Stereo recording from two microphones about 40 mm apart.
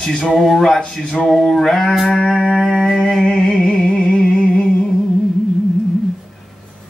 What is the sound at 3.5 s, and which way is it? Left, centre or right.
Music, centre.